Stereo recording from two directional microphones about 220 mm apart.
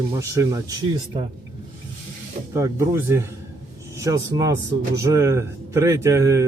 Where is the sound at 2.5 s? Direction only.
15° right (ahead or behind).